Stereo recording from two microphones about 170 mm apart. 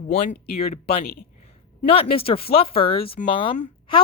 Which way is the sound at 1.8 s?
35° left (ahead or behind).